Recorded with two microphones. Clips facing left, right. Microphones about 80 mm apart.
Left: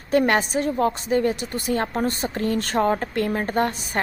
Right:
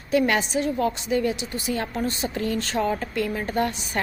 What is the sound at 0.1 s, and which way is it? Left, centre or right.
A woman's voice, left.